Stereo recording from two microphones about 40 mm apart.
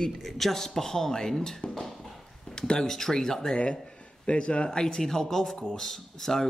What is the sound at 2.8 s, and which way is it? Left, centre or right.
Speech, centre.